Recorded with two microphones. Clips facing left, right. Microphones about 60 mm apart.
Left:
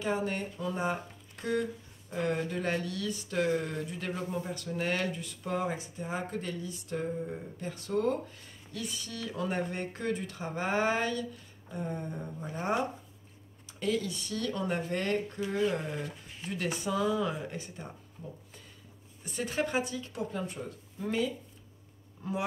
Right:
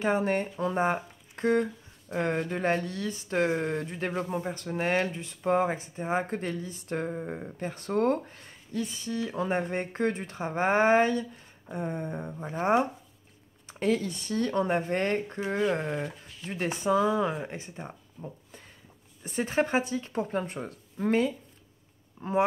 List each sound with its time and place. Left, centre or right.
0.0 s speech: right
7.0 s speech: right
8.7 s speech: right